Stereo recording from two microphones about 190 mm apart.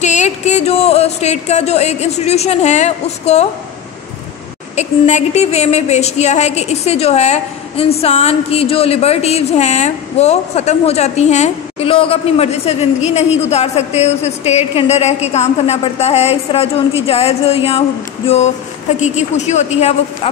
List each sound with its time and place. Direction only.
0.0 s a woman's voice: 40° left (ahead or behind)
4.7 s a woman's voice: 35° left (ahead or behind)
18.9 s a woman's voice: 40° left (ahead or behind)